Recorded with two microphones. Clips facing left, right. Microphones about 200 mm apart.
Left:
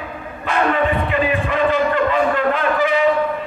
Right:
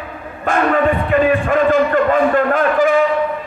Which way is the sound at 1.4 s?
50° right (ahead or behind).